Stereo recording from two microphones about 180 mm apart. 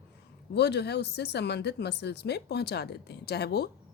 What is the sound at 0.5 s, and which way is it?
A woman's voice, 70° left (ahead or behind).